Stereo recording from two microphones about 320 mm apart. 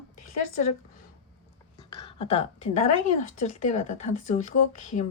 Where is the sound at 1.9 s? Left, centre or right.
Centre.